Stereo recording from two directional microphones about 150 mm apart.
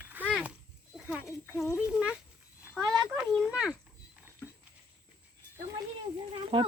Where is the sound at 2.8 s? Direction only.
25° right (ahead or behind).